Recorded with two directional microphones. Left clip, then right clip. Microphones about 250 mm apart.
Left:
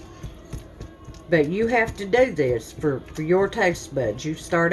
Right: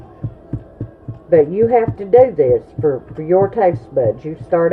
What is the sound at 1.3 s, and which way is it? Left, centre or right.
Speech, left.